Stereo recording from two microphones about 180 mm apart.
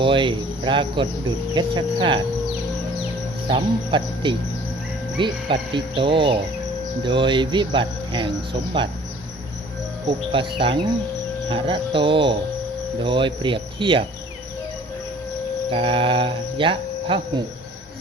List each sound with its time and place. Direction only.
0.0 s cricket: 25° right (ahead or behind)
3.5 s cricket: 25° right (ahead or behind)
10.3 s cricket: 30° right (ahead or behind)
15.7 s cricket: 30° right (ahead or behind)